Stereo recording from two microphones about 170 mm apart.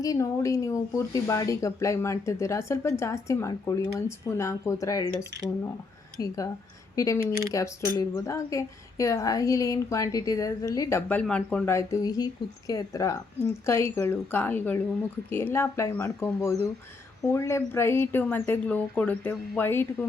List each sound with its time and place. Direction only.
0.0 s speech: 20° left (ahead or behind)
6.1 s a woman's voice: 20° left (ahead or behind)